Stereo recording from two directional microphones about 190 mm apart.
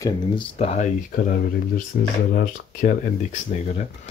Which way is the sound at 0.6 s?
35° left (ahead or behind).